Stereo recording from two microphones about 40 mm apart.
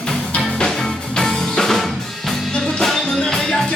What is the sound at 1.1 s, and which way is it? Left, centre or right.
Music, centre.